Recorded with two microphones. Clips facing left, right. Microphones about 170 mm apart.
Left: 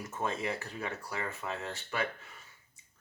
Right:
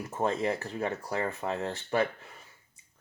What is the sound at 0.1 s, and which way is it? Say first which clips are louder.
Speech: right 6 dB; 35° right (ahead or behind).